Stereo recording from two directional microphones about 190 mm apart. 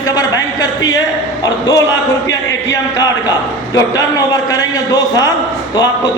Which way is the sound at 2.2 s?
70° left (ahead or behind).